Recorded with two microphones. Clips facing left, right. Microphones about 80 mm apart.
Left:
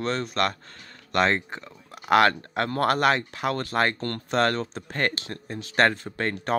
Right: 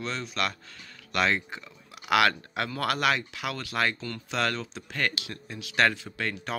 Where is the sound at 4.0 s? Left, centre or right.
Left.